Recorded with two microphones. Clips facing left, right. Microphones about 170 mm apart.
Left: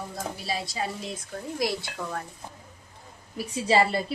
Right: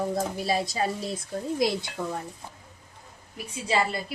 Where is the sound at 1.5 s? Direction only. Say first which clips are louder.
Right 2 dB; 20° right (ahead or behind).